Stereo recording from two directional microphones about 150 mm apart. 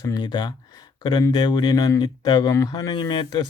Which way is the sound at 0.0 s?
25° left (ahead or behind).